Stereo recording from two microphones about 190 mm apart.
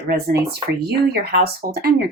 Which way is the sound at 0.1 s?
55° right (ahead or behind).